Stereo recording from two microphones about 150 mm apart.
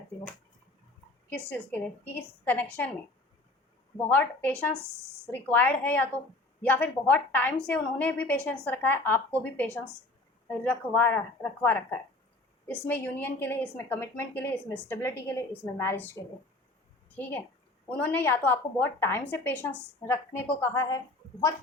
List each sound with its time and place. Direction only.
1.3 s a woman's voice: 10° left (ahead or behind)
3.9 s a woman's voice: 10° left (ahead or behind)
17.2 s a woman's voice: 15° left (ahead or behind)